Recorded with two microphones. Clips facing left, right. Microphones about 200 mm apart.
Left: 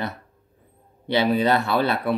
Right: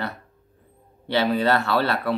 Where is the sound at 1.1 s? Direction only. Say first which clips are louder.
Left 1 dB; 15° left (ahead or behind).